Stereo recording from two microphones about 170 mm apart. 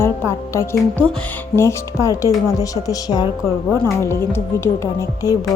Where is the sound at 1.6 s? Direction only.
15° left (ahead or behind).